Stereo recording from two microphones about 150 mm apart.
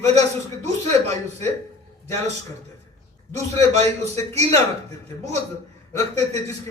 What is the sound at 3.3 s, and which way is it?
A man's voice, 45° right (ahead or behind).